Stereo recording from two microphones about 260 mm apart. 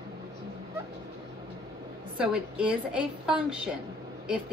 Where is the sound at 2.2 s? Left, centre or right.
Centre.